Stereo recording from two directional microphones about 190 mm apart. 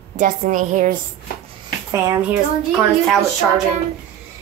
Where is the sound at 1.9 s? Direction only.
15° right (ahead or behind).